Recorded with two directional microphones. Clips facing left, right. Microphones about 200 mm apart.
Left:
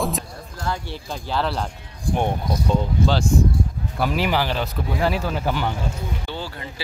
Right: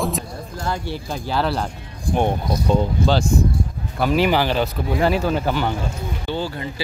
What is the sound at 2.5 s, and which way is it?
Speech, 30° right (ahead or behind).